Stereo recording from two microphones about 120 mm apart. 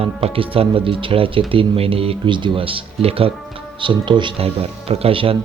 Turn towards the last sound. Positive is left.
turn(degrees=-50)  # may be behind; listen again after turning